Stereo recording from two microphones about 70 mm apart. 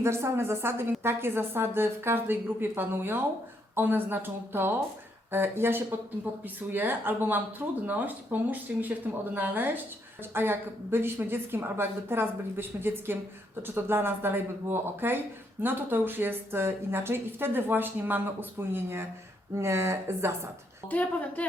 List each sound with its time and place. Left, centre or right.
0.0 s a woman's voice: right